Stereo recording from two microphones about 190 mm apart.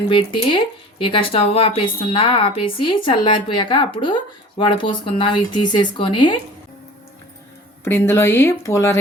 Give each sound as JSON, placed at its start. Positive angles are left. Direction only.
{"t": 0.1, "sound": "speech", "side_deg": 25}
{"t": 7.9, "sound": "speech", "side_deg": 10}